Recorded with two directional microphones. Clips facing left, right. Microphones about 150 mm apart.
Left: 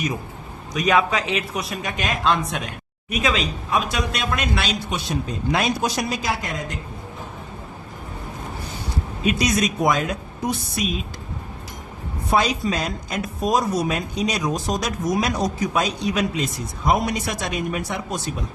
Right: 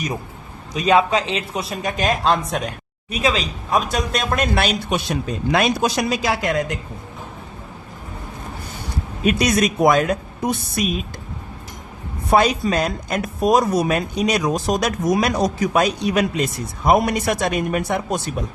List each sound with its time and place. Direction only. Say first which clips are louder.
0.7 s speech: right 3 dB; 30° right (ahead or behind); by 6.7 s 75° right (ahead or behind)
9.2 s speech: right 3 dB; 60° right (ahead or behind)
12.3 s speech: right 4 dB; 55° right (ahead or behind)